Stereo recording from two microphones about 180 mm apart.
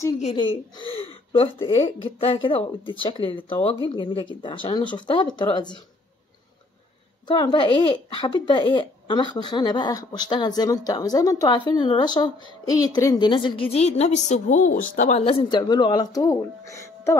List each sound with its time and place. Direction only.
0.2 s speech: 30° left (ahead or behind)
7.2 s speech: 25° left (ahead or behind)